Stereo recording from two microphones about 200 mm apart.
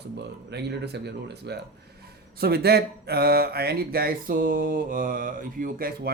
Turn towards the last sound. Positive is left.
turn(degrees=-45)  # may be behind; listen again after turning